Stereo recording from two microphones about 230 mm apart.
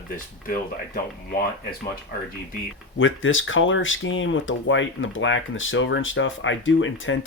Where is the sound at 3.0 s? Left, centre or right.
Left.